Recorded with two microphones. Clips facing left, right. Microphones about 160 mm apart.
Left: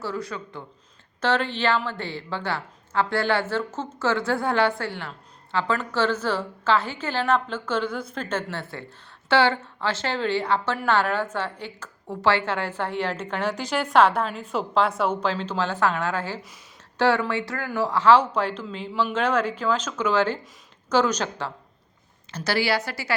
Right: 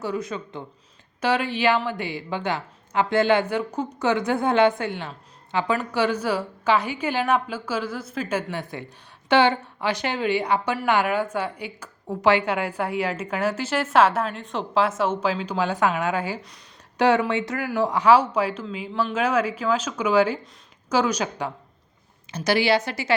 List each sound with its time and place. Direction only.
0.0 s a woman's voice: 20° right (ahead or behind)